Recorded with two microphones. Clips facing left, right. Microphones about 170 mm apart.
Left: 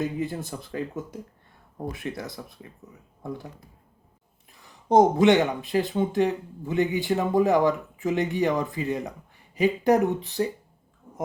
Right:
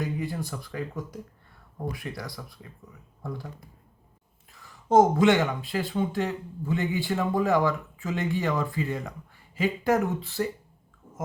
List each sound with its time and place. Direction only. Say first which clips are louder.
0.0 s speech: left 3 dB; 20° left (ahead or behind)
4.6 s a sound: left 1 dB; 20° left (ahead or behind)
5.2 s speech: left 3 dB; 20° left (ahead or behind)